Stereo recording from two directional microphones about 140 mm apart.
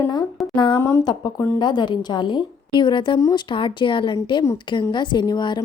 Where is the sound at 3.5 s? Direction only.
35° left (ahead or behind).